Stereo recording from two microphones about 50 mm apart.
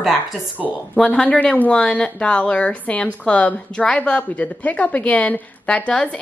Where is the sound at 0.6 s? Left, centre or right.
Centre.